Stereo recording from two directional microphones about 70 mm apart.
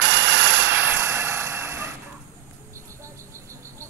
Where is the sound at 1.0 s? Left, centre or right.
Right.